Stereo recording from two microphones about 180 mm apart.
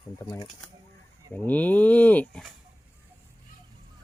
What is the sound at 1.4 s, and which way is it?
Livestock, 10° left (ahead or behind).